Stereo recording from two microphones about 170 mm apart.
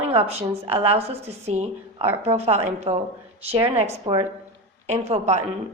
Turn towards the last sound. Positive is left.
turn(degrees=-40)  # may be behind; listen again after turning